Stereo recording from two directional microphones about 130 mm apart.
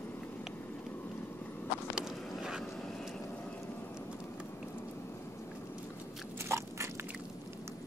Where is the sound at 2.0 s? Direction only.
5° right (ahead or behind).